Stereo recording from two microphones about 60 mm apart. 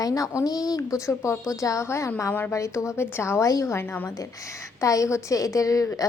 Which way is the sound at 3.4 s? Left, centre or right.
Left.